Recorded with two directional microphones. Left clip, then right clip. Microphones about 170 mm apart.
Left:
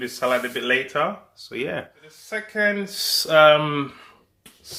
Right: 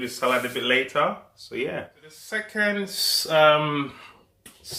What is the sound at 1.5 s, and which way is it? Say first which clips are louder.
Speech: left 1 dB; 50° left (ahead or behind).